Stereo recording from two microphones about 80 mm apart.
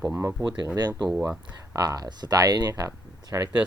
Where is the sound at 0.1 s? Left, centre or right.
Right.